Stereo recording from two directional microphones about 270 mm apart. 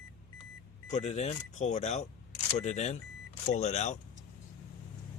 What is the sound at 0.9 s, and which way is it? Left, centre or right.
Speech, left.